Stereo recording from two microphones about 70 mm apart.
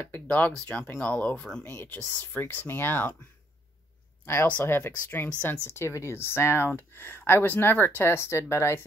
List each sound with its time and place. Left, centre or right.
0.1 s speech: left
1.6 s speech: left
4.5 s speech: left